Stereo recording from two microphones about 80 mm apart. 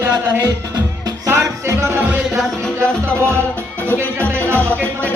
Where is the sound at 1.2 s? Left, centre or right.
Right.